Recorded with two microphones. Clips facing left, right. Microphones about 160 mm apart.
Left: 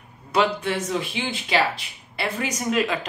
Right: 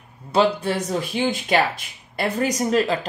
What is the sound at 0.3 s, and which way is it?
Speech, 35° right (ahead or behind).